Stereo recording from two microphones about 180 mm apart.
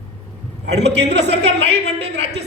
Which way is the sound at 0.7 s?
70° right (ahead or behind).